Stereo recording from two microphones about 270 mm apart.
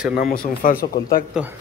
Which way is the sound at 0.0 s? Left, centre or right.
Centre.